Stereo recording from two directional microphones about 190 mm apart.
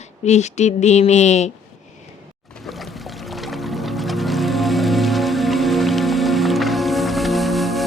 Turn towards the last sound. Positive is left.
turn(degrees=0)  # may be behind; listen again after turning